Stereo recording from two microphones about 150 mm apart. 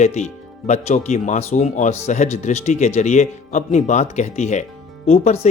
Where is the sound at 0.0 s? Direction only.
50° left (ahead or behind).